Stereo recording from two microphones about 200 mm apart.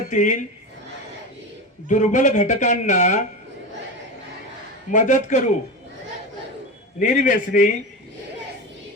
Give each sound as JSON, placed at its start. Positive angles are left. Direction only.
{"t": 0.1, "sound": "speech", "side_deg": 40}
{"t": 1.9, "sound": "speech", "side_deg": 40}
{"t": 4.9, "sound": "speech", "side_deg": 40}
{"t": 7.0, "sound": "speech", "side_deg": 40}